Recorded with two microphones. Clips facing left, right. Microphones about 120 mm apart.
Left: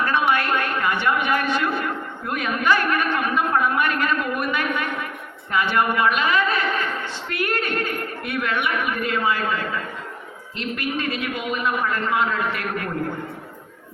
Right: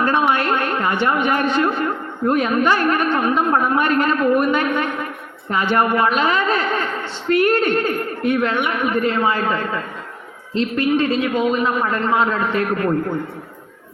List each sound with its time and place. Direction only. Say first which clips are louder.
0.3 s a woman's voice: right 3 dB; 30° right (ahead or behind)